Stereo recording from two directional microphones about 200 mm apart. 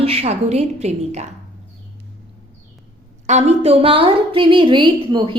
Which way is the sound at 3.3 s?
35° right (ahead or behind).